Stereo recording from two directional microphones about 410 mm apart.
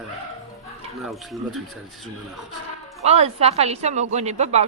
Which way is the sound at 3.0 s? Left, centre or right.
Centre.